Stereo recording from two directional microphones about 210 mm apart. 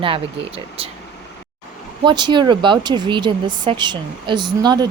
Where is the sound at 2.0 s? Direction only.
20° right (ahead or behind).